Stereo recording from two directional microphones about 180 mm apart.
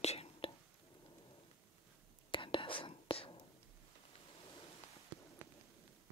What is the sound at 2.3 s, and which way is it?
Whispering, 25° left (ahead or behind).